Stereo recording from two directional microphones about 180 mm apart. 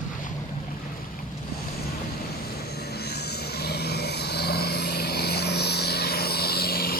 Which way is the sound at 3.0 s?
65° left (ahead or behind).